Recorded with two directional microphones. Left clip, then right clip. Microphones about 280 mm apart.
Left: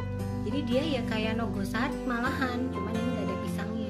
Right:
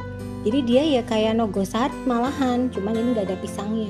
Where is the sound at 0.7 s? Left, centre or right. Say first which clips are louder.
Right 10 dB; right.